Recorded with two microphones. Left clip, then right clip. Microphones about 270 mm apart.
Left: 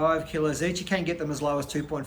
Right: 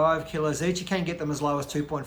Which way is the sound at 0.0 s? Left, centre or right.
Centre.